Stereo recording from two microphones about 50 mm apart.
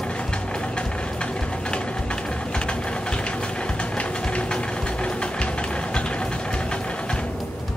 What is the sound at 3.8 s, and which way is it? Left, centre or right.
Engine, left.